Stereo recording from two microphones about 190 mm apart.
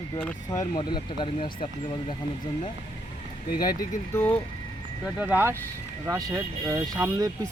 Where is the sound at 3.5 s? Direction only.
50° left (ahead or behind).